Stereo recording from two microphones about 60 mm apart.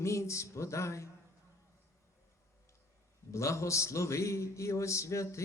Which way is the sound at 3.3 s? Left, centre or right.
Left.